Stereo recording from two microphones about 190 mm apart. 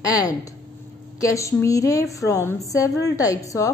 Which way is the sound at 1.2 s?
15° left (ahead or behind).